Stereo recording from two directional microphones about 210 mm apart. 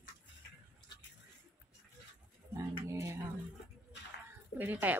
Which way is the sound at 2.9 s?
15° right (ahead or behind).